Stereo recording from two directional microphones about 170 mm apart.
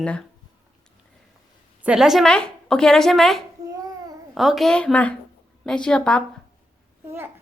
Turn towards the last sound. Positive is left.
turn(degrees=-15)  # may be behind; listen again after turning